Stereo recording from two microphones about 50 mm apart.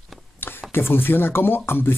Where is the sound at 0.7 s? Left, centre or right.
Left.